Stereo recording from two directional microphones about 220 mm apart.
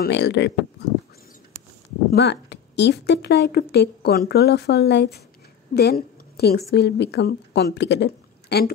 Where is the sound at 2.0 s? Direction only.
50° left (ahead or behind).